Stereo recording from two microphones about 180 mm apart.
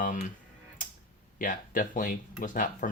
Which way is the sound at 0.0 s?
45° left (ahead or behind).